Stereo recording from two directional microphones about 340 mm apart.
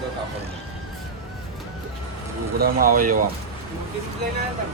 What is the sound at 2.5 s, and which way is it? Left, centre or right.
Speech, right.